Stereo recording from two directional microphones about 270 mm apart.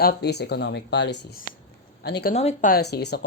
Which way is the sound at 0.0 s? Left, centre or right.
Left.